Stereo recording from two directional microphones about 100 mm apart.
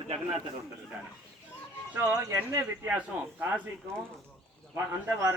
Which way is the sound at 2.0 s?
35° right (ahead or behind).